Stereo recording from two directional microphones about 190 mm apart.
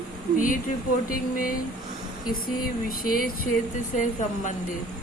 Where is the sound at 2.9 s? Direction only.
50° left (ahead or behind).